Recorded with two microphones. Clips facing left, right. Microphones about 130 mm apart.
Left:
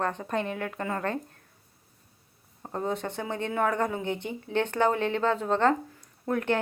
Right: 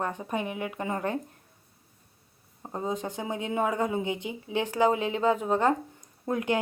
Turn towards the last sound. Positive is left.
turn(degrees=-15)  # may be behind; listen again after turning